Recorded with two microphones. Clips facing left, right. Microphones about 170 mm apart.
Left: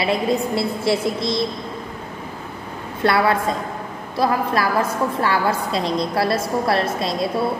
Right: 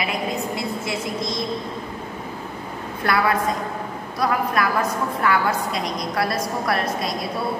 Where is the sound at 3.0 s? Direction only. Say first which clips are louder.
Left 3 dB; 25° left (ahead or behind).